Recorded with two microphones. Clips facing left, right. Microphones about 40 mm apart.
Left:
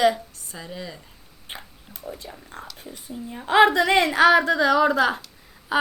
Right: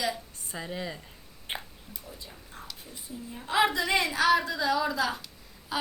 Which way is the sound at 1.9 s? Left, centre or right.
Left.